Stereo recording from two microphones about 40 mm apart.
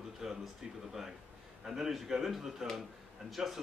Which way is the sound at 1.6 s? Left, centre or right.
Centre.